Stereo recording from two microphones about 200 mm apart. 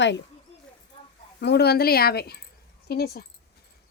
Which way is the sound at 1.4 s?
55° left (ahead or behind).